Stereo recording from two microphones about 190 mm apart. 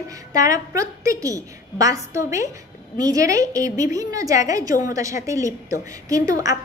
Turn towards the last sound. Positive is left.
turn(degrees=-20)  # may be behind; listen again after turning